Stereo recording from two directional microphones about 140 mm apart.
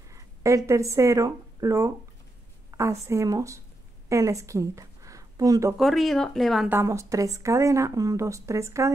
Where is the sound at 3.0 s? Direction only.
20° right (ahead or behind).